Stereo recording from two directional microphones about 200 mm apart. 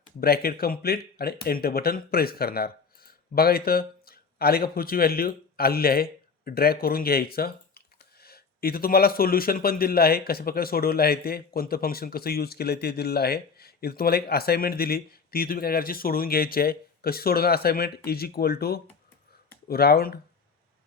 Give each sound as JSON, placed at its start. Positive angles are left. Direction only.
{"t": 0.2, "sound": "a man's voice", "side_deg": 50}